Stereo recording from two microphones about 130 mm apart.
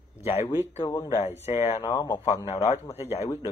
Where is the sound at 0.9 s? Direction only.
30° left (ahead or behind).